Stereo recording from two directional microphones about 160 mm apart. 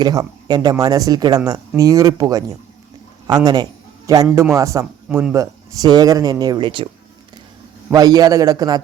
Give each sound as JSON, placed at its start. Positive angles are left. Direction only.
{"t": 0.0, "sound": "a man's voice", "side_deg": -25}
{"t": 5.0, "sound": "speech", "side_deg": -5}
{"t": 5.3, "sound": "speech", "side_deg": -20}
{"t": 7.9, "sound": "speech", "side_deg": -20}